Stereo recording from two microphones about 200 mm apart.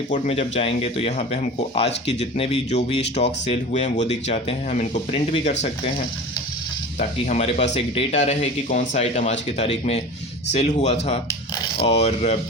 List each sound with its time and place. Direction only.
0.1 s speech: 35° left (ahead or behind)
7.0 s speech: 35° left (ahead or behind)